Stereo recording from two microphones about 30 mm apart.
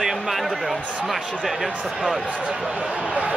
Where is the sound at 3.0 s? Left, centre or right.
Right.